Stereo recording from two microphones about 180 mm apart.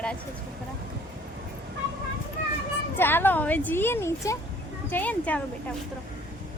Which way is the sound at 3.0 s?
10° left (ahead or behind).